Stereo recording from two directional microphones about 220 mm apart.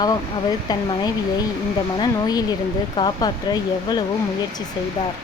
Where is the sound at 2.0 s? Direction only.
15° left (ahead or behind).